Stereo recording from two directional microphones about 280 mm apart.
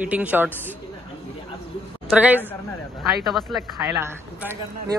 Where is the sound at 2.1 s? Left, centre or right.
Centre.